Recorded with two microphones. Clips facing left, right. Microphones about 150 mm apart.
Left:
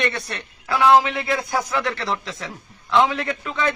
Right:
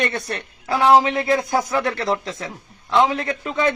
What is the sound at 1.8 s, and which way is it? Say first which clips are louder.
A man's voice: right 3 dB; 45° right (ahead or behind).